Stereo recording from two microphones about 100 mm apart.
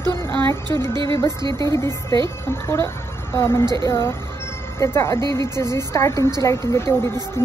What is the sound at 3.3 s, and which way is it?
Speech, 25° left (ahead or behind).